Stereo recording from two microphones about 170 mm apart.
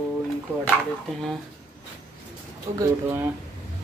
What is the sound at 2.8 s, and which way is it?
Speech, 10° right (ahead or behind).